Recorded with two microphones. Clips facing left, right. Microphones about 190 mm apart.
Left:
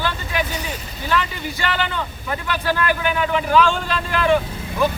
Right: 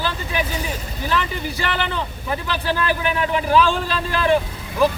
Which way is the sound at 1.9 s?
30° right (ahead or behind).